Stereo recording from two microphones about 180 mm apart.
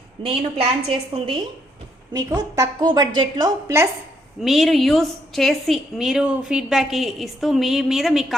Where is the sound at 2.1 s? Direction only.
20° right (ahead or behind).